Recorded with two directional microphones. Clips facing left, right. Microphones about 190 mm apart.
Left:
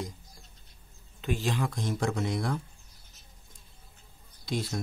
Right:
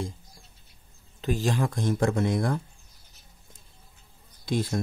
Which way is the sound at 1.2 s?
40° right (ahead or behind).